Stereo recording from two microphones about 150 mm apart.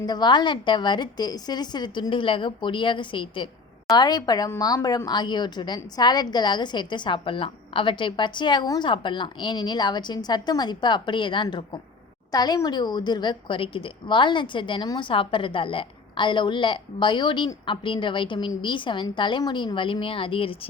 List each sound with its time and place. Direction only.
0.0 s a woman's voice: 30° left (ahead or behind)